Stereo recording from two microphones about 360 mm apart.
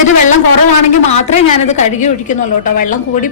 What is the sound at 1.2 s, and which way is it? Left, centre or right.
A woman's voice, centre.